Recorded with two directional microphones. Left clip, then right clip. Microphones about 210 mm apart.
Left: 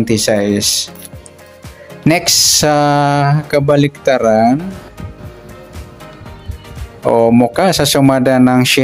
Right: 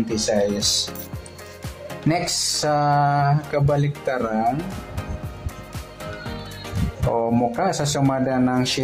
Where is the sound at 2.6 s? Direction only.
40° left (ahead or behind).